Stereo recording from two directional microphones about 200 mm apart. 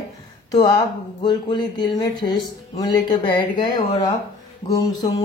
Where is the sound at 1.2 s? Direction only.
20° left (ahead or behind).